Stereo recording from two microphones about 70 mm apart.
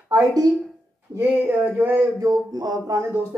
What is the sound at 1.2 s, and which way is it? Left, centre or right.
Speech, right.